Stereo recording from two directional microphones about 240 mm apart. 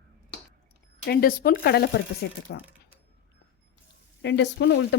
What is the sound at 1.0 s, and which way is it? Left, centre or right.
A woman's voice, left.